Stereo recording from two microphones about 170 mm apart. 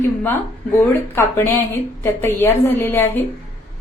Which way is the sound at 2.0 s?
15° left (ahead or behind).